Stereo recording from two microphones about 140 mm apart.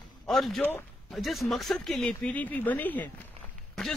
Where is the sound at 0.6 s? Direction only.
15° left (ahead or behind).